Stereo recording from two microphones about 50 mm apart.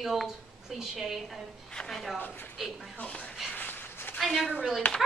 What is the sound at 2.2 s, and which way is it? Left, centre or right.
Speech, left.